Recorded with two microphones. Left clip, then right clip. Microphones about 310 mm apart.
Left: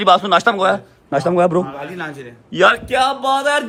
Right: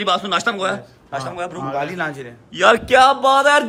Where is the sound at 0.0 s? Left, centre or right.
Centre.